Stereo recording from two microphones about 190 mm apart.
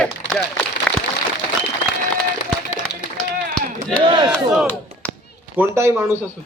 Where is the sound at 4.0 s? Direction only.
25° right (ahead or behind).